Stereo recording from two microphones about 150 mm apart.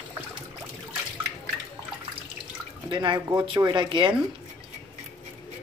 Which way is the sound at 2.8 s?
30° right (ahead or behind).